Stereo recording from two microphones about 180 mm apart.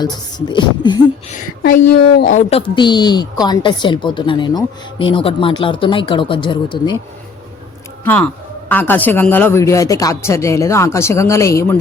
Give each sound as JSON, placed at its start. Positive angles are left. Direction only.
{"t": 0.0, "sound": "a woman's voice", "side_deg": 25}
{"t": 1.3, "sound": "speech", "side_deg": 50}
{"t": 2.5, "sound": "a woman's voice", "side_deg": 30}
{"t": 8.0, "sound": "speech", "side_deg": 10}